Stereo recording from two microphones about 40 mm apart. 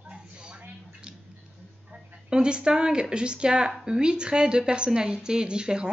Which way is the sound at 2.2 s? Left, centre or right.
Right.